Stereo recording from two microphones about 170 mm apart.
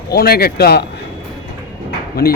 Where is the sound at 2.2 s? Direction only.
70° left (ahead or behind).